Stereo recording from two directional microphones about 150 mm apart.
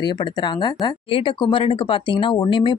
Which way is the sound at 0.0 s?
30° left (ahead or behind).